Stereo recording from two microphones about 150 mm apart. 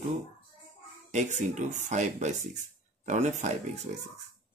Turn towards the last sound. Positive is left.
turn(degrees=-50)  # may be behind; listen again after turning